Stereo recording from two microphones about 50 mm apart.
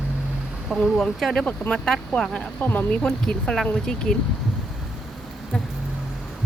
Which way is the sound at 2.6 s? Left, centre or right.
Left.